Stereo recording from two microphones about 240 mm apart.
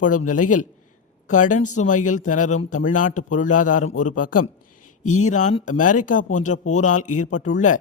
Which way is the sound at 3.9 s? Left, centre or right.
Left.